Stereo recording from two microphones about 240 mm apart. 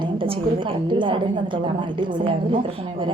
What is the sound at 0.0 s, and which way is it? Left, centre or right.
A woman's voice, centre.